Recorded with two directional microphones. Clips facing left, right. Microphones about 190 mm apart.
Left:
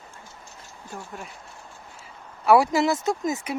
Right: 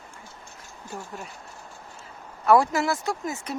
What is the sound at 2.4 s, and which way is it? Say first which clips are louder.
Speech: left 2 dB; 10° left (ahead or behind).